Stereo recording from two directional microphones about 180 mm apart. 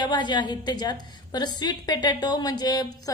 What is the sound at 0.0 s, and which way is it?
A woman's voice, 25° left (ahead or behind).